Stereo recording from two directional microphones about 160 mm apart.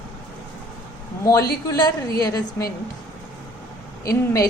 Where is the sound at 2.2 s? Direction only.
20° left (ahead or behind).